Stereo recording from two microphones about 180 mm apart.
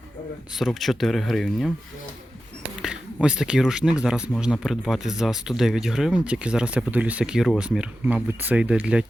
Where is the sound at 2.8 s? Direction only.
5° right (ahead or behind).